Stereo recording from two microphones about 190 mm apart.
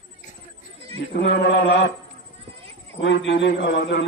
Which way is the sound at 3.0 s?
70° left (ahead or behind).